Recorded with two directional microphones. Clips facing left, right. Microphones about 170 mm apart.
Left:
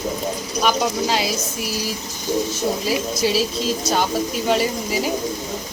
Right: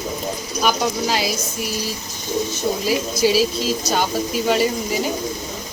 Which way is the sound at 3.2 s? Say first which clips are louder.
Right 5 dB; centre (ahead or behind).